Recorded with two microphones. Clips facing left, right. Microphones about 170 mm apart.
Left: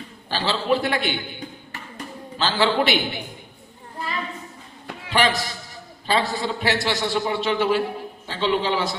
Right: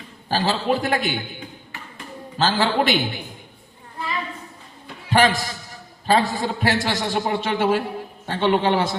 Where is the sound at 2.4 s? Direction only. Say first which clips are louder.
Right 1 dB; 45° right (ahead or behind).